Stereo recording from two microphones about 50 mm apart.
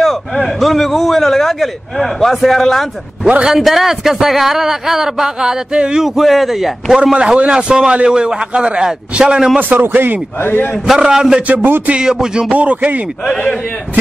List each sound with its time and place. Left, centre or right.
0.0 s a sound: centre
0.4 s a man's voice: centre
6.0 s a man's voice: centre
7.2 s a man's voice: right
9.6 s a man's voice: right
10.4 s a man's voice: left
10.9 s a man's voice: centre
11.4 s a man's voice: right
12.0 s a man's voice: centre
12.5 s a man's voice: right